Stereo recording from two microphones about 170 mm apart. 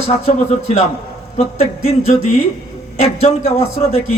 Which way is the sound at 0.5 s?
40° left (ahead or behind).